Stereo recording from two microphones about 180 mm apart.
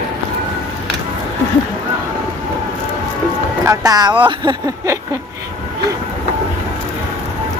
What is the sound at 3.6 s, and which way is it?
Speech, 20° right (ahead or behind).